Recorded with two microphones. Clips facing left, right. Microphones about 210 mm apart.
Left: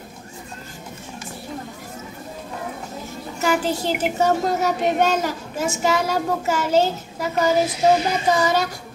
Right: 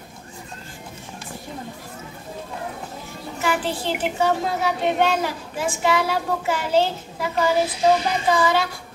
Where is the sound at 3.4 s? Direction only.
40° left (ahead or behind).